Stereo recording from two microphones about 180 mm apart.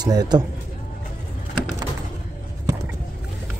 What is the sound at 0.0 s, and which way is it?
Speech, 20° right (ahead or behind).